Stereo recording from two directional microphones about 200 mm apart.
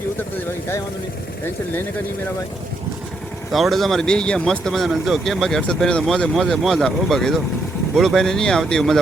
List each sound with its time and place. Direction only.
3.5 s speech: centre (ahead or behind)